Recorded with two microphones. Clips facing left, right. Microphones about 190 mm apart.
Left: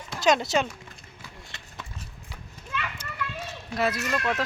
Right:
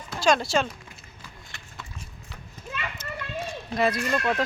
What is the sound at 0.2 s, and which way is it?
Speech, 20° left (ahead or behind).